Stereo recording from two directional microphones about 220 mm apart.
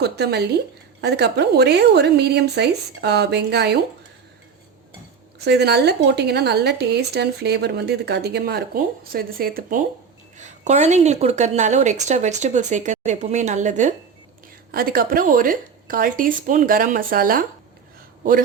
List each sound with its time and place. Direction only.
0.0 s speech: 50° right (ahead or behind)
5.5 s a woman's voice: 50° right (ahead or behind)